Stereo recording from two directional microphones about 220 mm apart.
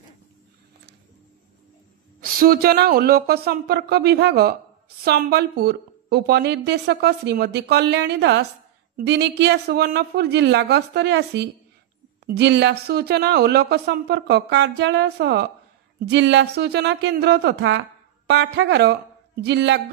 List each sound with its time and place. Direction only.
2.3 s speech: 40° right (ahead or behind)